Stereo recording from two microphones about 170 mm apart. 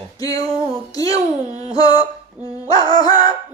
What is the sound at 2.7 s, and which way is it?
Music, 25° left (ahead or behind).